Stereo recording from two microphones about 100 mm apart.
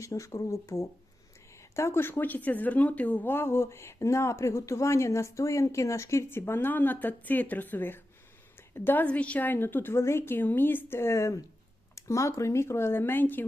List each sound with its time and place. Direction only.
0.0 s speech: 30° left (ahead or behind)